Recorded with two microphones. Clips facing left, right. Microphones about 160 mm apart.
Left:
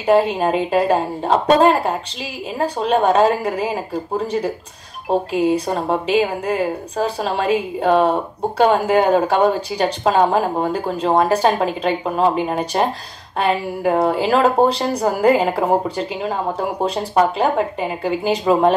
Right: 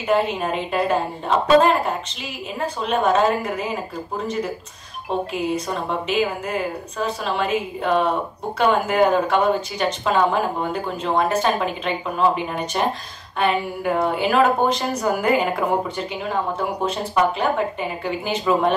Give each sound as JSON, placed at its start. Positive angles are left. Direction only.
{"t": 0.0, "sound": "speech", "side_deg": 35}